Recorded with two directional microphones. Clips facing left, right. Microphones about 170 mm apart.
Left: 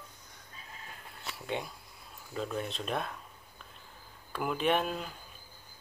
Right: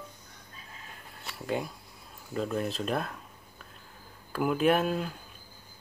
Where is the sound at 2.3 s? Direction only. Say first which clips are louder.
Right 5 dB; centre (ahead or behind).